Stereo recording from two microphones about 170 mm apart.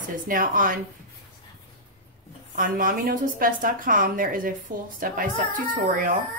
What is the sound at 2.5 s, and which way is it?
A woman's voice, 55° right (ahead or behind).